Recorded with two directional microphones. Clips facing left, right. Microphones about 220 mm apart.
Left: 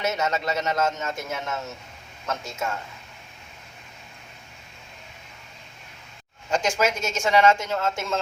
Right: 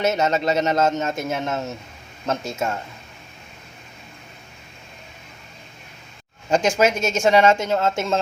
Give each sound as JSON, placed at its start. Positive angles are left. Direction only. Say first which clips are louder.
{"t": 0.0, "sound": "speech", "louder": "right 6 dB", "side_deg": -25}
{"t": 6.5, "sound": "speech", "louder": "right 5 dB", "side_deg": -25}